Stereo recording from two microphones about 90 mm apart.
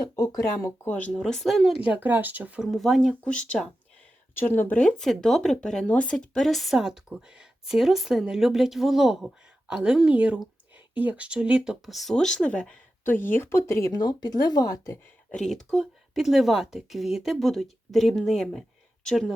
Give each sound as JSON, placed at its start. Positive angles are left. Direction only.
{"t": 0.2, "sound": "speech", "side_deg": 35}
{"t": 0.9, "sound": "speech", "side_deg": 15}
{"t": 1.2, "sound": "speech", "side_deg": 5}
{"t": 1.8, "sound": "speech", "side_deg": -20}
{"t": 2.6, "sound": "speech", "side_deg": 0}
{"t": 3.1, "sound": "speech", "side_deg": 10}
{"t": 4.4, "sound": "speech", "side_deg": 25}
{"t": 4.8, "sound": "speech", "side_deg": 10}
{"t": 13.9, "sound": "speech", "side_deg": 50}
{"t": 15.3, "sound": "speech", "side_deg": 5}